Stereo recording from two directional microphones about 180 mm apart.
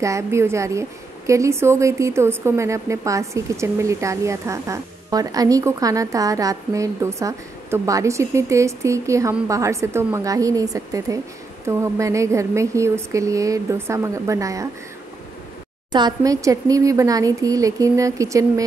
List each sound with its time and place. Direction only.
0.0 s a woman's voice: 15° right (ahead or behind)
15.9 s a woman's voice: 25° right (ahead or behind)